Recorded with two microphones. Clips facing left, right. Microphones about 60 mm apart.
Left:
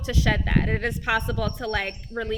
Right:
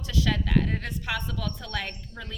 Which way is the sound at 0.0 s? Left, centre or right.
Left.